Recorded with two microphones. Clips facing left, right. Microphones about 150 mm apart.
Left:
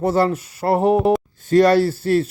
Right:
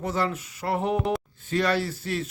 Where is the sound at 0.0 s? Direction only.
40° left (ahead or behind).